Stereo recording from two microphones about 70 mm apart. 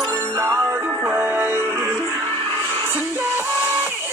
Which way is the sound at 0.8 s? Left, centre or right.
Right.